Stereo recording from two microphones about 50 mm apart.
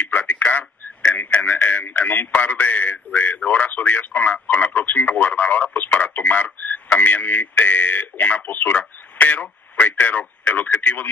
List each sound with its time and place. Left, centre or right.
0.0 s radio: left
2.0 s a man's voice: left